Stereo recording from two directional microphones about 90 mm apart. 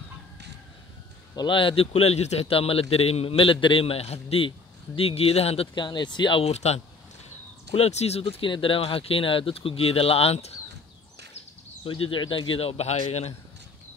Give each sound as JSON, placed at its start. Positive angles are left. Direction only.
{"t": 1.3, "sound": "a man's voice", "side_deg": 60}
{"t": 7.7, "sound": "a man's voice", "side_deg": 90}
{"t": 11.8, "sound": "speech", "side_deg": 80}